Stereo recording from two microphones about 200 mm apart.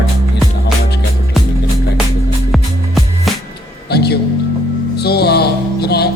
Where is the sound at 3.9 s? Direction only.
55° left (ahead or behind).